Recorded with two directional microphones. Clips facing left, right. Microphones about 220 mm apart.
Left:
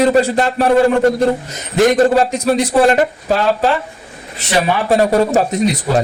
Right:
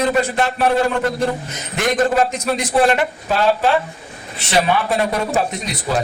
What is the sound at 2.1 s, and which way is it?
A man's voice, 35° left (ahead or behind).